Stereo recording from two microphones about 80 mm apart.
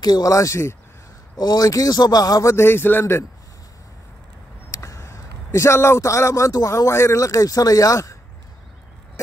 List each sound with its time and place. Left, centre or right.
0.0 s speech: left
1.4 s speech: left
2.4 s a man's voice: left
4.6 s a man's voice: left